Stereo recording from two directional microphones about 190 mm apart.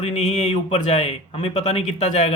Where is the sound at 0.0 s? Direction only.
35° left (ahead or behind).